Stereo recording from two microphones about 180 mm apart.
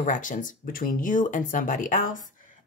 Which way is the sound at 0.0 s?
45° left (ahead or behind).